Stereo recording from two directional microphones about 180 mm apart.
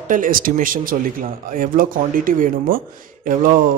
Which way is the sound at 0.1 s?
50° right (ahead or behind).